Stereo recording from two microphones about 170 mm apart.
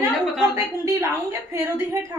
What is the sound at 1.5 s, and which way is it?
Speech, 15° right (ahead or behind).